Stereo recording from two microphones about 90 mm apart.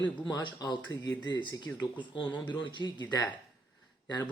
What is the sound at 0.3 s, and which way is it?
Speech, 55° left (ahead or behind).